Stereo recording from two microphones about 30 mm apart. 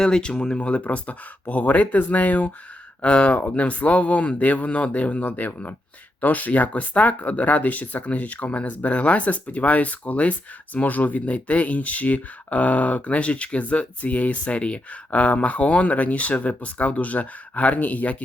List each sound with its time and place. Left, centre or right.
0.2 s speech: left
0.6 s speech: left
3.0 s speech: left
5.2 s speech: left
6.2 s speech: left
10.8 s speech: left
14.4 s speech: left